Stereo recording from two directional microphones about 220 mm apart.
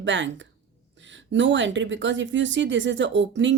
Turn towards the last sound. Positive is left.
turn(degrees=-55)  # may be behind; listen again after turning